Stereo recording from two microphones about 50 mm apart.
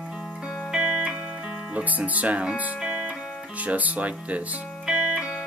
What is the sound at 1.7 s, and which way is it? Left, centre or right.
Speech, right.